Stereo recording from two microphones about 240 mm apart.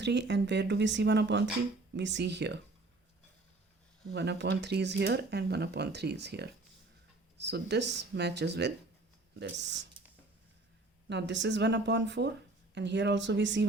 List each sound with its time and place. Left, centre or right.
0.0 s speech: right
4.1 s speech: right
11.1 s speech: right